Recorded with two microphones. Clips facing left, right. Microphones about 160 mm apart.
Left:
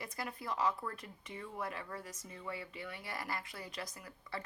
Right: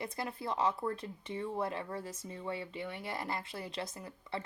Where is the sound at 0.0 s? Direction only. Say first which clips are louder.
Right 4 dB; 25° right (ahead or behind).